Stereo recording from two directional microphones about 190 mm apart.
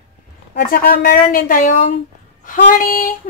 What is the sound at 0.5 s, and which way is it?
Speech, 55° left (ahead or behind).